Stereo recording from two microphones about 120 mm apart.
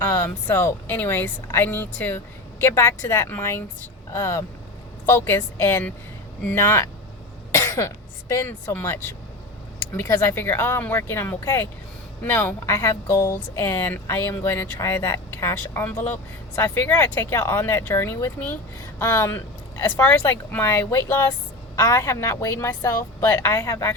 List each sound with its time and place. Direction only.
0.0 s speech: 20° left (ahead or behind)